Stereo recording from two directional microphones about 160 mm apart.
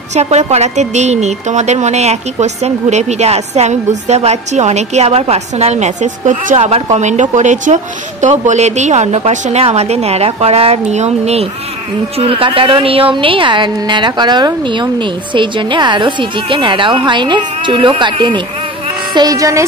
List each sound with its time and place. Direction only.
0.1 s a woman's voice: 45° right (ahead or behind); by 19.6 s 20° right (ahead or behind)